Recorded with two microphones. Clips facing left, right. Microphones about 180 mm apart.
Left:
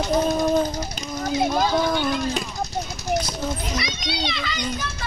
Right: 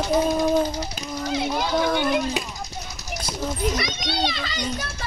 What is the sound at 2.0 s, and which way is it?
Speech, 5° right (ahead or behind).